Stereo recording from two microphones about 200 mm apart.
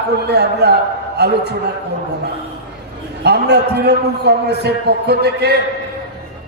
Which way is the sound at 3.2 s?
55° right (ahead or behind).